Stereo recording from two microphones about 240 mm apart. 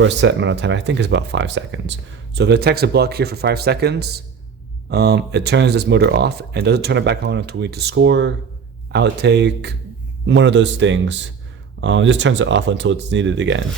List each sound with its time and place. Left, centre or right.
0.0 s speech: right